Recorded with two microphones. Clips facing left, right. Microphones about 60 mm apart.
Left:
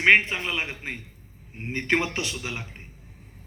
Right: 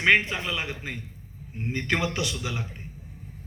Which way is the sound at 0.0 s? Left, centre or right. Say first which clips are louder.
Left 2 dB; left.